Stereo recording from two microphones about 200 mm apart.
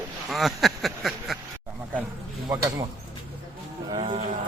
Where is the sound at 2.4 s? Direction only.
15° right (ahead or behind).